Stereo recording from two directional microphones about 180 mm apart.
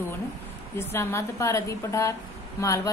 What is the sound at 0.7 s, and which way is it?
A woman's voice, 15° left (ahead or behind).